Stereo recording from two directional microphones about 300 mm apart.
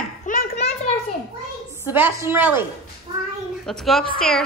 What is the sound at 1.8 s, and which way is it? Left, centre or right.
A woman's voice, centre.